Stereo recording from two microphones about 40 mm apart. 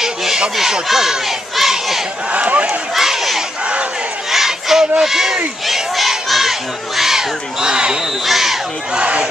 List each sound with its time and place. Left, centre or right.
0.0 s a sound: centre
1.6 s crowd: centre
2.3 s a sound: right
2.9 s crowd: centre
5.0 s speech: centre
5.7 s crowd: centre
7.0 s speech: centre
8.3 s speech: centre
8.9 s speech: right